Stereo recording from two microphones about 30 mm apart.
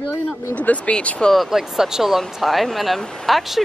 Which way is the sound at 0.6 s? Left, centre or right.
Left.